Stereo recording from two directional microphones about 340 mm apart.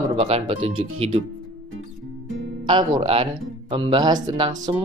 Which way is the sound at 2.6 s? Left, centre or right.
Centre.